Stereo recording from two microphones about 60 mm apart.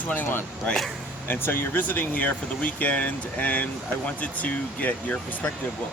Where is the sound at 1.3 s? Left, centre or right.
Left.